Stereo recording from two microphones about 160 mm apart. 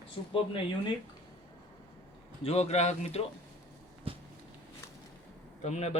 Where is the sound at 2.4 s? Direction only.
40° left (ahead or behind).